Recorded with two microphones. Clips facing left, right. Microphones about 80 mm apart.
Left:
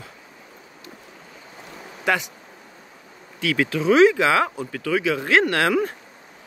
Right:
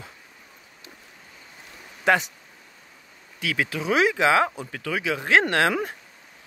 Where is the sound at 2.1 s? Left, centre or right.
Right.